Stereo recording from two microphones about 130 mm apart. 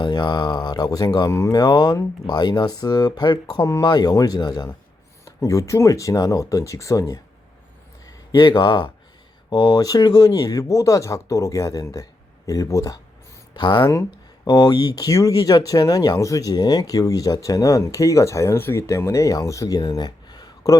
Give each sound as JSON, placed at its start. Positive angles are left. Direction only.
{"t": 0.0, "sound": "speech", "side_deg": 35}